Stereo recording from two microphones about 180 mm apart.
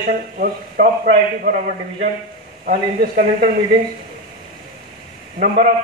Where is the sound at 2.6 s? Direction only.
50° right (ahead or behind).